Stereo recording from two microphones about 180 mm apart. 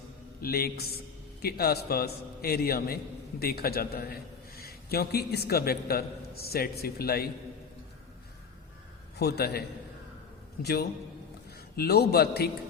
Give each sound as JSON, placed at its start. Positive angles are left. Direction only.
{"t": 0.4, "sound": "a man's voice", "side_deg": 60}
{"t": 9.1, "sound": "a man's voice", "side_deg": 60}